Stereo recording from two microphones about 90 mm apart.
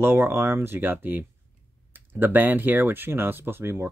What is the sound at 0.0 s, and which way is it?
Speech, 25° right (ahead or behind).